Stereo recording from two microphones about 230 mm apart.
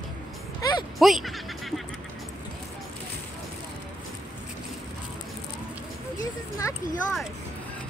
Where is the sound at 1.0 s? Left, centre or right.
Centre.